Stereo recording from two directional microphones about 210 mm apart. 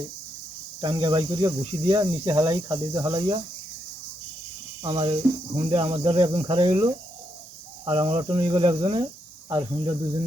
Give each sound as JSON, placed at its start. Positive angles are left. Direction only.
{"t": 0.8, "sound": "speech", "side_deg": -20}
{"t": 4.8, "sound": "speech", "side_deg": -20}